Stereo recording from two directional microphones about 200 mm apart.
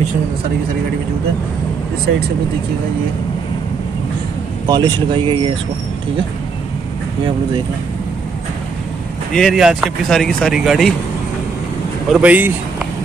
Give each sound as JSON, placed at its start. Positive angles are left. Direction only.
{"t": 4.6, "sound": "speech", "side_deg": -20}
{"t": 9.3, "sound": "speech", "side_deg": 0}
{"t": 12.1, "sound": "a man's voice", "side_deg": -5}